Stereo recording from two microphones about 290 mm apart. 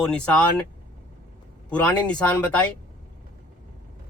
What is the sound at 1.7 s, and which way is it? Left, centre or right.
Speech, centre.